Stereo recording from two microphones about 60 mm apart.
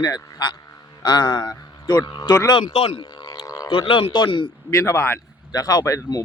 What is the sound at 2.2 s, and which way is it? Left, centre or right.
Speech, left.